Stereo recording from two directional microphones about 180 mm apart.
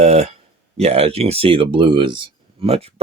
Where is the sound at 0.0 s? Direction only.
35° right (ahead or behind).